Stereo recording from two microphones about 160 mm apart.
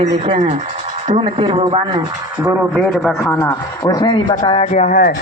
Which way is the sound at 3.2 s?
15° left (ahead or behind).